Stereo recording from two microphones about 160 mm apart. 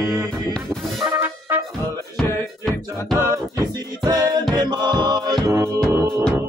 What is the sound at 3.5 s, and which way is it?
Music, 25° right (ahead or behind).